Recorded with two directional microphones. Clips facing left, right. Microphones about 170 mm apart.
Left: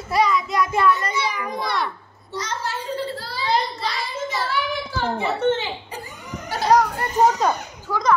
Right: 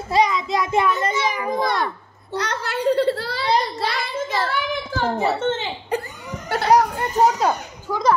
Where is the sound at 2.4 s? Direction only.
65° right (ahead or behind).